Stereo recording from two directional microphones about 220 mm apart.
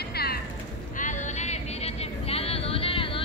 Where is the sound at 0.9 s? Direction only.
35° left (ahead or behind).